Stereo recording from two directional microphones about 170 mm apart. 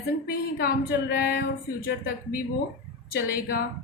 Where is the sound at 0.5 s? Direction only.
70° left (ahead or behind).